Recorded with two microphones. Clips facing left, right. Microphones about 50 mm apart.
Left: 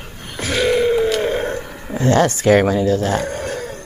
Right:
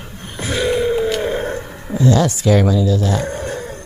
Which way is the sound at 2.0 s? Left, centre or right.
Left.